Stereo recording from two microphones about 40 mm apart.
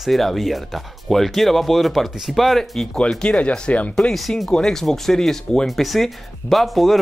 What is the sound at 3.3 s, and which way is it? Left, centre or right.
Speech, left.